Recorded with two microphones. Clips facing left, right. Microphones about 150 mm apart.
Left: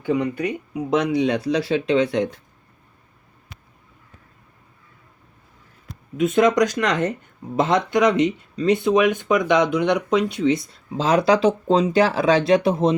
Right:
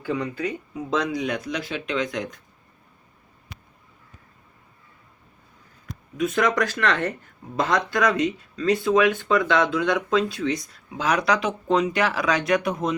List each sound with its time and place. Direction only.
0.0 s speech: 15° left (ahead or behind)
5.8 s speech: 25° left (ahead or behind)